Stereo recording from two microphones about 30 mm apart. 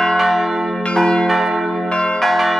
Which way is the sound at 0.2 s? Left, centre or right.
Centre.